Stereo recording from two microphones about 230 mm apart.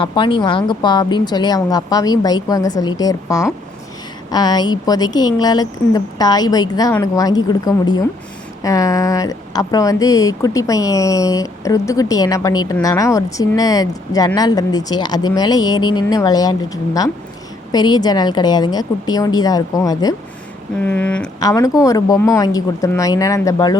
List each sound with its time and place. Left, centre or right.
0.0 s speech: left
20.8 s a sound: centre
21.4 s speech: centre